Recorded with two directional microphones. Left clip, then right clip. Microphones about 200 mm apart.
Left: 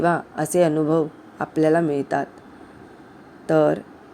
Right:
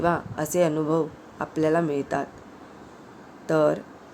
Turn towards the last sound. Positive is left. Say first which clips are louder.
# left 3 dB
turn(degrees=15)  # may be behind; listen again after turning